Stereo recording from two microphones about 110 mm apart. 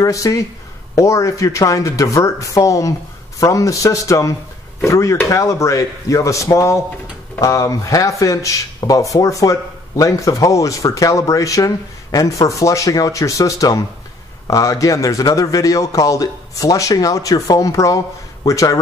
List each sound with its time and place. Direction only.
0.0 s a man's voice: 30° left (ahead or behind)